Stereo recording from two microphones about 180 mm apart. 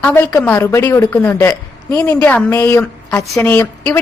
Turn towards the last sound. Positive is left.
turn(degrees=15)  # may be behind; listen again after turning